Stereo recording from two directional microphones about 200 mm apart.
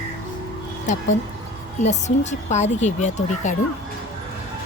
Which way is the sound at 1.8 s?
35° left (ahead or behind).